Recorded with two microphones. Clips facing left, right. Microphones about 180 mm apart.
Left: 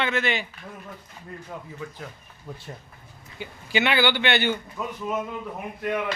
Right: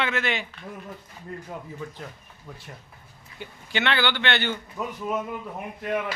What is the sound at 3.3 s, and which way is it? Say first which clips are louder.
Speech: left 4 dB; 5° left (ahead or behind).